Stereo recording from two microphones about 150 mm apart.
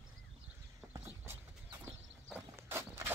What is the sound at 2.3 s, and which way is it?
Walk, 15° right (ahead or behind).